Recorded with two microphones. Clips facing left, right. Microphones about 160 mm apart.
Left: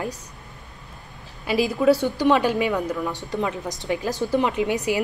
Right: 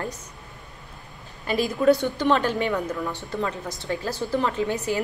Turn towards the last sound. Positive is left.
turn(degrees=15)  # may be behind; listen again after turning